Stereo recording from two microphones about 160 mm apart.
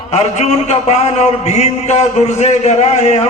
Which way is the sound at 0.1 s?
45° left (ahead or behind).